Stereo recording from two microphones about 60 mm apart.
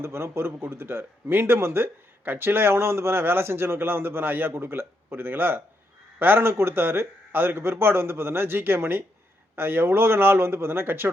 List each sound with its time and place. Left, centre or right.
0.0 s a man's voice: right